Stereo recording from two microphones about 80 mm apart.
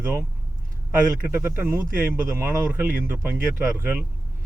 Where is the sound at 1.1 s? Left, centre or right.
Right.